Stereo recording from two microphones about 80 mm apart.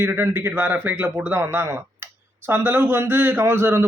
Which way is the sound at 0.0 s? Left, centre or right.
Right.